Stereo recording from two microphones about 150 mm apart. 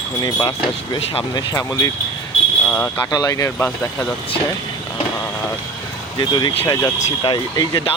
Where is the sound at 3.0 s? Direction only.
25° left (ahead or behind).